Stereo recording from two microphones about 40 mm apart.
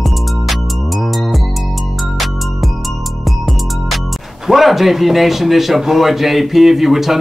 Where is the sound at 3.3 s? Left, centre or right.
Centre.